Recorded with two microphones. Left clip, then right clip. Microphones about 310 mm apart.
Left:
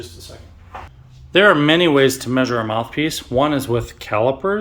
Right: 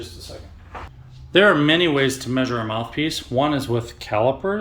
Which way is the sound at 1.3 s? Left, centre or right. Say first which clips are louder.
Left 3 dB; centre.